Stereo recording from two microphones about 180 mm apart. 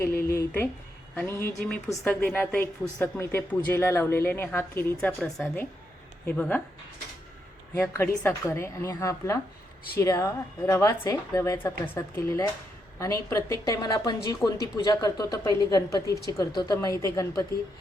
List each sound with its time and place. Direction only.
0.1 s speech: 55° left (ahead or behind)
0.3 s a woman's voice: 15° left (ahead or behind)
7.7 s a woman's voice: 15° left (ahead or behind)